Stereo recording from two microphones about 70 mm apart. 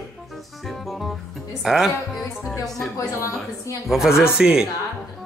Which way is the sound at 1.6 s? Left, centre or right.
Centre.